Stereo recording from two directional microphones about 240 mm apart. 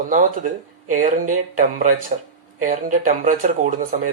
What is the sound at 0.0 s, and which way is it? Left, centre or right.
Speech, right.